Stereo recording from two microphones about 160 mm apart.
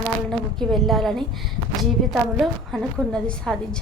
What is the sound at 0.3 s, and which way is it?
A woman's voice, centre (ahead or behind).